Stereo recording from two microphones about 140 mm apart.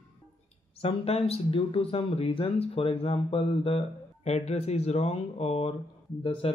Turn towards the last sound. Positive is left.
turn(degrees=45)  # may be behind; listen again after turning